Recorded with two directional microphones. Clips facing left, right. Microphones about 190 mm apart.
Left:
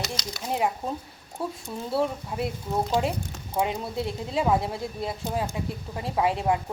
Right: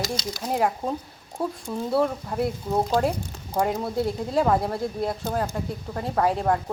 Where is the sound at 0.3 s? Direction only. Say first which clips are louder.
Right 2 dB; centre (ahead or behind).